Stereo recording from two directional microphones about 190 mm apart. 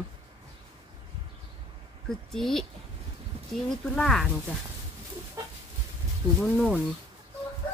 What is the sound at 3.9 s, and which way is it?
Speech, centre (ahead or behind).